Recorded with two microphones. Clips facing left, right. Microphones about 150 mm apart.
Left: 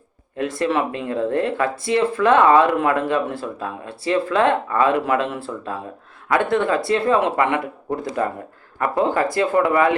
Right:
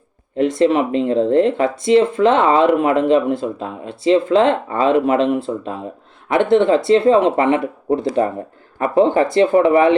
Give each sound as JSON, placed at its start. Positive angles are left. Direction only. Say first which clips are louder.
{"t": 0.3, "sound": "speech", "louder": "right 6 dB", "side_deg": -20}